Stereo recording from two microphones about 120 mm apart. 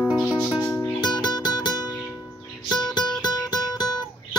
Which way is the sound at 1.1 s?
35° left (ahead or behind).